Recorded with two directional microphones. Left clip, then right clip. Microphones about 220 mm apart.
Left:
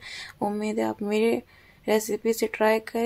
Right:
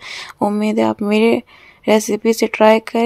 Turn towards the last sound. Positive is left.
turn(degrees=-30)  # may be behind; listen again after turning